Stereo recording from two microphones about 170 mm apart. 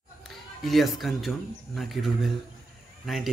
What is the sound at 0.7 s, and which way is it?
Speech, centre (ahead or behind).